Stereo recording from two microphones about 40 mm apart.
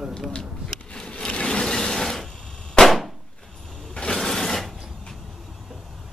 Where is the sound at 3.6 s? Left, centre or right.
Centre.